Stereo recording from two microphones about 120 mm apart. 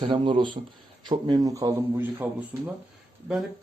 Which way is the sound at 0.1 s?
45° right (ahead or behind).